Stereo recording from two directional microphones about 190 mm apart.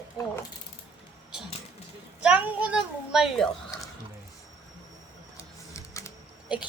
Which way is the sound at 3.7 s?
20° left (ahead or behind).